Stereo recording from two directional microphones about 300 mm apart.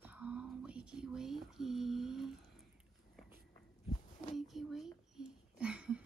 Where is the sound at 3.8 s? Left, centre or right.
Left.